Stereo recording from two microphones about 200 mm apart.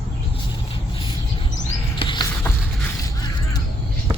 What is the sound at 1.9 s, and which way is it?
Rodents, 25° left (ahead or behind).